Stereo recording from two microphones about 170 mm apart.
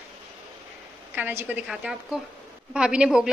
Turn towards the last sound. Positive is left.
turn(degrees=-5)  # may be behind; listen again after turning